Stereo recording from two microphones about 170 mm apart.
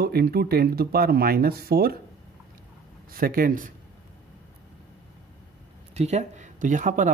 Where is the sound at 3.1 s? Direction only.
60° right (ahead or behind).